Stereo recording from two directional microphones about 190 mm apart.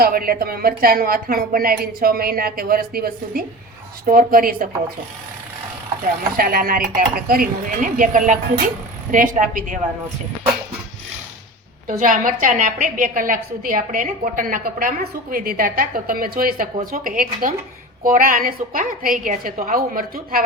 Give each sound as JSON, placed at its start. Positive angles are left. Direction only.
{"t": 0.0, "sound": "a woman's voice", "side_deg": -50}
{"t": 6.3, "sound": "a woman's voice", "side_deg": -50}
{"t": 11.9, "sound": "a woman's voice", "side_deg": -45}